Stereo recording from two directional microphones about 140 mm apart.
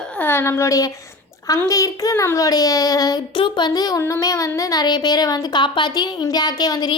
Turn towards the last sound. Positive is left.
turn(degrees=30)  # may be behind; listen again after turning